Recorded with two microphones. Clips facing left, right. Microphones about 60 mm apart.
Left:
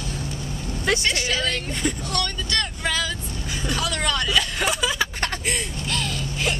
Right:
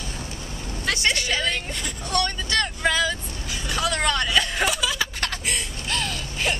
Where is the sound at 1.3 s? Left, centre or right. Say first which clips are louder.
Even; centre.